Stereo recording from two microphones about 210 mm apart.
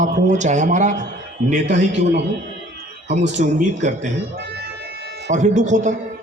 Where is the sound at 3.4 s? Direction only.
40° right (ahead or behind).